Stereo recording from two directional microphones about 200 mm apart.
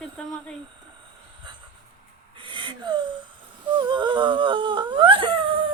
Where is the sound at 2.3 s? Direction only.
25° right (ahead or behind).